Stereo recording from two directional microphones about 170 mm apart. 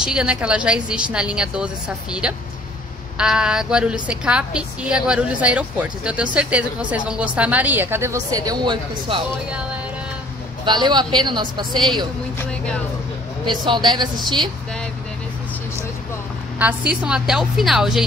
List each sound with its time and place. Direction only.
0.0 s a woman's voice: 5° right (ahead or behind); by 9.2 s 25° right (ahead or behind)
9.5 s a woman's voice: 5° right (ahead or behind)
10.6 s speech: 25° right (ahead or behind)
12.4 s a woman's voice: 5° left (ahead or behind)
13.5 s speech: 25° right (ahead or behind)
16.9 s a woman's voice: 5° right (ahead or behind)